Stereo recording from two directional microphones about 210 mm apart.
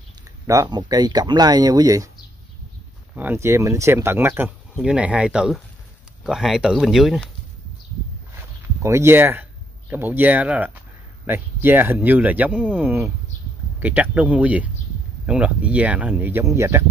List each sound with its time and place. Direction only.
0.5 s speech: 20° right (ahead or behind)
3.2 s speech: 10° right (ahead or behind)
8.4 s speech: 10° right (ahead or behind)